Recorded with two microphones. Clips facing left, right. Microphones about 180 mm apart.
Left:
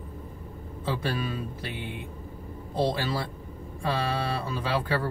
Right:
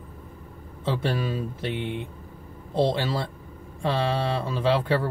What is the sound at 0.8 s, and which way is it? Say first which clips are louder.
Speech: right 3 dB; 25° right (ahead or behind).